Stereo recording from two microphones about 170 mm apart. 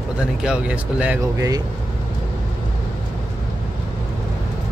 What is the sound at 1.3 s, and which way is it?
Speech, 20° right (ahead or behind).